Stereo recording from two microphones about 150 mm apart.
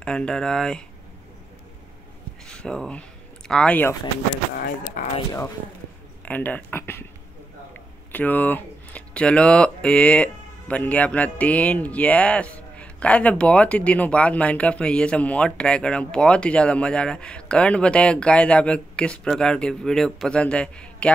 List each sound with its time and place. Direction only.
0.0 s speech: 5° left (ahead or behind)
2.4 s speech: 5° left (ahead or behind)
4.6 s speech: 65° left (ahead or behind)
6.2 s speech: 10° left (ahead or behind)
8.1 s speech: 10° left (ahead or behind)